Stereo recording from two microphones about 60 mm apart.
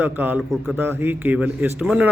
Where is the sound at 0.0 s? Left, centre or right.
Right.